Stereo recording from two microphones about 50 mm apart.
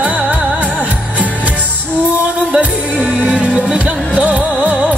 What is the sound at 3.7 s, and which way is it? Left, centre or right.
Music, right.